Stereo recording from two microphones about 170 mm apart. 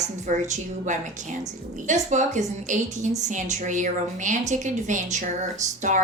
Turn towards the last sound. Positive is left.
turn(degrees=-45)  # may be behind; listen again after turning